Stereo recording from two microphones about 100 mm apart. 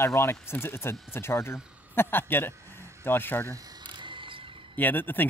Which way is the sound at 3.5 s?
40° right (ahead or behind).